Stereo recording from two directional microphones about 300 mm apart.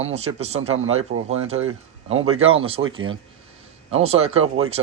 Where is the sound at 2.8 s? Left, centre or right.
Right.